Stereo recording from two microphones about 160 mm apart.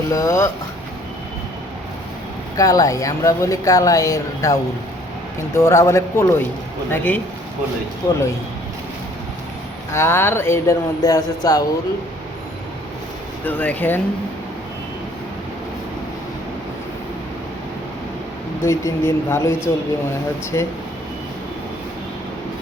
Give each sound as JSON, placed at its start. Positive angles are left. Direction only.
{"t": 0.1, "sound": "speech", "side_deg": 20}
{"t": 2.6, "sound": "speech", "side_deg": 20}
{"t": 5.5, "sound": "speech", "side_deg": 20}
{"t": 9.9, "sound": "speech", "side_deg": 15}
{"t": 13.4, "sound": "speech", "side_deg": 10}
{"t": 18.6, "sound": "speech", "side_deg": 20}